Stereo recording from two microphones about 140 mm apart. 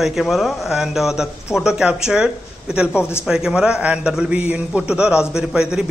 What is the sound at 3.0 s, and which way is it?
Speech, 15° left (ahead or behind).